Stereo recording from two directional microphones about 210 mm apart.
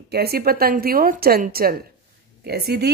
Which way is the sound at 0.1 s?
50° right (ahead or behind).